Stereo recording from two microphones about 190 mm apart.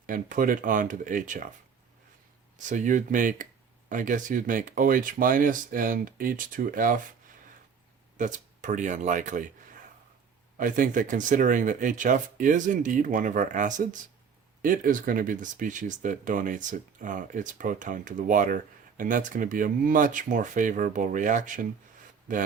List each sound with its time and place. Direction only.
0.0 s speech: 45° right (ahead or behind)
2.6 s speech: 40° right (ahead or behind)
8.2 s speech: 40° right (ahead or behind)
10.6 s speech: 45° right (ahead or behind)